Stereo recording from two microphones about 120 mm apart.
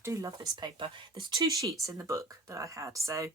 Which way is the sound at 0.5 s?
45° right (ahead or behind).